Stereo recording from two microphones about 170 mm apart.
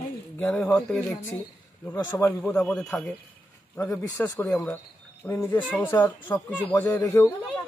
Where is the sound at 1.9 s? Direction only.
15° left (ahead or behind).